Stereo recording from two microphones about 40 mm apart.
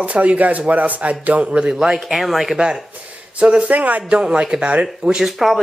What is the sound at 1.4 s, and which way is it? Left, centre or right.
Speech, right.